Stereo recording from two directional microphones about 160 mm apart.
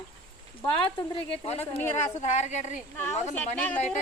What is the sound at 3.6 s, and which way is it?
Speech, 10° left (ahead or behind).